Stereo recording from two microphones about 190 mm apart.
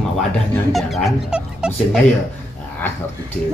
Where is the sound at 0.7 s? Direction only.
Centre (ahead or behind).